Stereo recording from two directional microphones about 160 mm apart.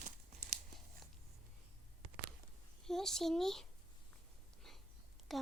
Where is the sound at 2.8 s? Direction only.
5° left (ahead or behind).